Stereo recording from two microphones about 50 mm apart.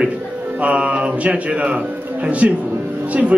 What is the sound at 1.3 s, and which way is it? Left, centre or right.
Speech, right.